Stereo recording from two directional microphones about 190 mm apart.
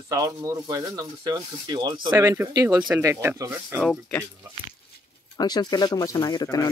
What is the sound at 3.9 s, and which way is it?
Speech, 10° left (ahead or behind).